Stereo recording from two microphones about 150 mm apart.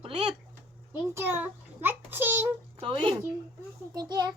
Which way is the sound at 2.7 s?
35° right (ahead or behind).